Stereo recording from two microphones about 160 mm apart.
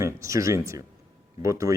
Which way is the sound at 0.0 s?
20° right (ahead or behind).